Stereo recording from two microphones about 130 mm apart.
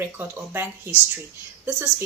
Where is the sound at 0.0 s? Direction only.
15° right (ahead or behind).